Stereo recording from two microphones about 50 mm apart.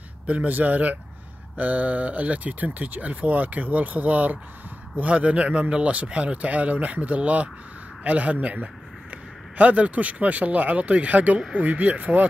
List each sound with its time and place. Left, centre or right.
0.3 s a man's voice: right